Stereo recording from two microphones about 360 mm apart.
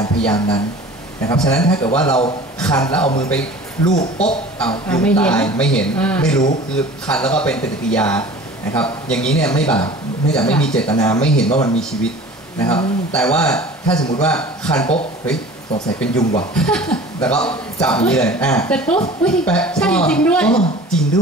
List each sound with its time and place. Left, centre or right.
0.0 s a man's voice: centre
9.8 s speech: centre
10.4 s a man's voice: centre
11.5 s a man's voice: centre
12.5 s a man's voice: centre
16.0 s a man's voice: centre